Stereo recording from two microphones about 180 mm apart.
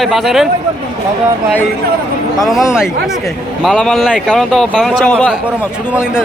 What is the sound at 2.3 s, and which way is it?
A man's voice, centre (ahead or behind).